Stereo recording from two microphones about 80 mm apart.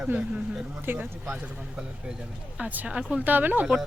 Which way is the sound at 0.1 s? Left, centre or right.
Centre.